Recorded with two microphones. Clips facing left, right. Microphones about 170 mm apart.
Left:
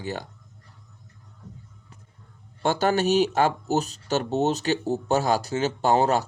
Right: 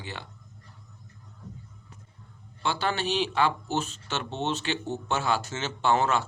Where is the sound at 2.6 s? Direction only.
45° left (ahead or behind).